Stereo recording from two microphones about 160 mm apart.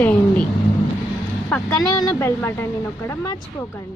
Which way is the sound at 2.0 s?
15° left (ahead or behind).